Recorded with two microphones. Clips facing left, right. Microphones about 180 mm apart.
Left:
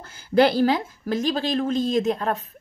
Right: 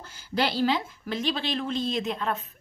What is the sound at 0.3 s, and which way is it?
A woman's voice, 50° left (ahead or behind).